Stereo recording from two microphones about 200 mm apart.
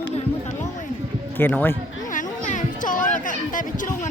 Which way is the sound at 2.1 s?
40° left (ahead or behind).